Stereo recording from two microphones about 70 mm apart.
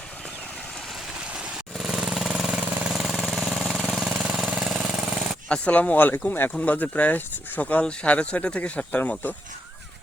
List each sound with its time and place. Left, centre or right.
1.8 s vehicle: centre
3.0 s jackhammer: centre
4.3 s jackhammer: centre
5.5 s speech: centre